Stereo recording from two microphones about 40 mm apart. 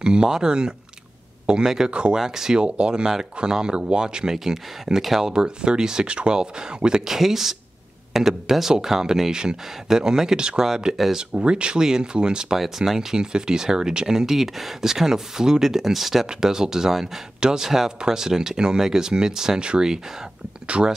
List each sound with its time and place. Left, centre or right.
0.0 s speech: right
2.1 s speech: centre
2.6 s speech: right; by 5.3 s centre
5.3 s speech: centre
7.1 s speech: centre
11.1 s speech: right
12.5 s speech: centre
16.3 s speech: centre